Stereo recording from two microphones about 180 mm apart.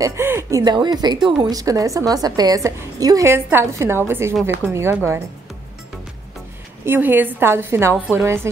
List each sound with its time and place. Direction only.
0.0 s a woman's voice: 15° right (ahead or behind)
6.9 s a woman's voice: 10° right (ahead or behind)